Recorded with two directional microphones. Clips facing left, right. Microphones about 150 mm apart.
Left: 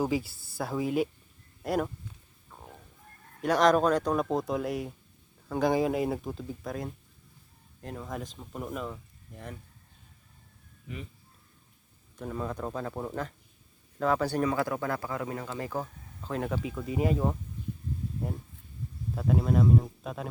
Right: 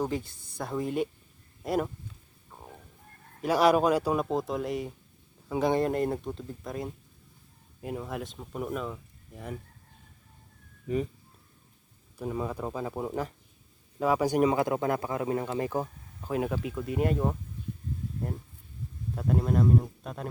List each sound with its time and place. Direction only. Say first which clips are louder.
0.0 s speech: left 2 dB; 5° left (ahead or behind)
3.4 s speech: even; 5° right (ahead or behind)
10.8 s speech: right 12 dB; 40° right (ahead or behind)
12.1 s speech: right 2 dB; 10° right (ahead or behind)
19.1 s speech: even; centre (ahead or behind)